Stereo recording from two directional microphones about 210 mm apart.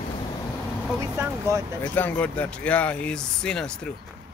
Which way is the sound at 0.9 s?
10° right (ahead or behind).